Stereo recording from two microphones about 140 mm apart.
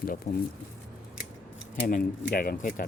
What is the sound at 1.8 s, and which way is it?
Speech, 90° left.